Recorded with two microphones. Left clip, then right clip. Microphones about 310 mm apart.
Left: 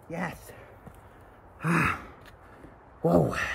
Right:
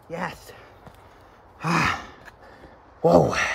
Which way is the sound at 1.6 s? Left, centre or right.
Right.